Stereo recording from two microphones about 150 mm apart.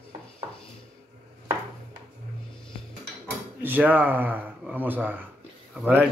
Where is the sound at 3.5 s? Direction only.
10° right (ahead or behind).